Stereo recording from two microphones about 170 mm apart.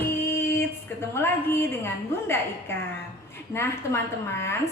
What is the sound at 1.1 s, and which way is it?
A woman's voice, 15° left (ahead or behind).